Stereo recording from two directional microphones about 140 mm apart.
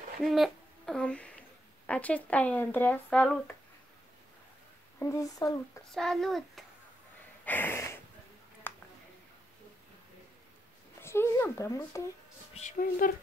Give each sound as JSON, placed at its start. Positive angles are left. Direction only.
{"t": 0.2, "sound": "speech", "side_deg": 0}
{"t": 4.9, "sound": "speech", "side_deg": 20}
{"t": 5.9, "sound": "a child's voice", "side_deg": 5}
{"t": 7.4, "sound": "snort", "side_deg": 15}
{"t": 8.6, "sound": "a sound", "side_deg": 15}
{"t": 11.0, "sound": "a sound", "side_deg": 20}
{"t": 12.6, "sound": "speech", "side_deg": 50}
{"t": 13.0, "sound": "speech", "side_deg": 80}